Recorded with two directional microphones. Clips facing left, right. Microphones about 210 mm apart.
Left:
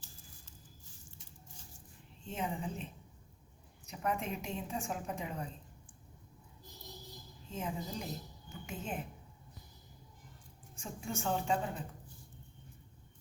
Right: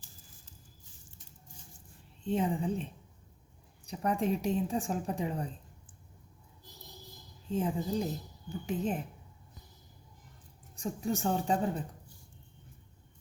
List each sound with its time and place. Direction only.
2.2 s a woman's voice: 30° right (ahead or behind)
3.8 s a woman's voice: 35° right (ahead or behind)
7.4 s a woman's voice: 30° right (ahead or behind)
10.8 s a woman's voice: 35° right (ahead or behind)